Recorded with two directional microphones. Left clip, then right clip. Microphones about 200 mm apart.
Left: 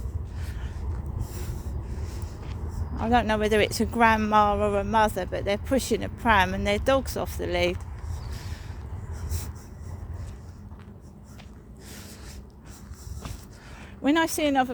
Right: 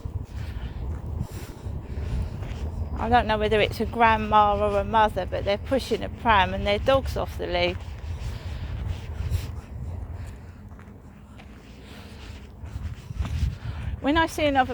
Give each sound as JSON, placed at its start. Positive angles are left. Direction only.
{"t": 1.2, "sound": "a sound", "side_deg": 55}
{"t": 3.0, "sound": "speech", "side_deg": 55}
{"t": 14.0, "sound": "speech", "side_deg": 55}